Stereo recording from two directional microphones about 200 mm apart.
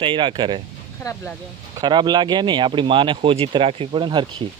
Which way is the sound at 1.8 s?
20° right (ahead or behind).